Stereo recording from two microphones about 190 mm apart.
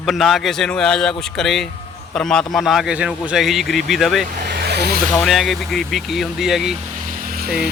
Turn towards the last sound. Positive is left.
turn(degrees=-55)  # may be behind; listen again after turning